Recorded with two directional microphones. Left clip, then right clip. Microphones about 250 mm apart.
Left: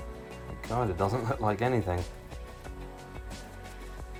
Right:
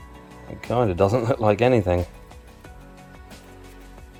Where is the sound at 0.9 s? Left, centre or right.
Right.